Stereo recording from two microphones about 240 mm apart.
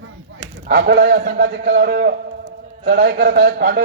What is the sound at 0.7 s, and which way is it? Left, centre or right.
A man's voice, right.